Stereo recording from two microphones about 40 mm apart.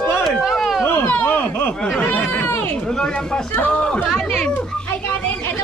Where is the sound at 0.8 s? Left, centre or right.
Left.